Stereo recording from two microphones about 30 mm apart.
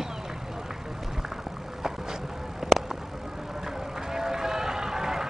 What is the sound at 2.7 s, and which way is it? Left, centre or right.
Vehicle, centre.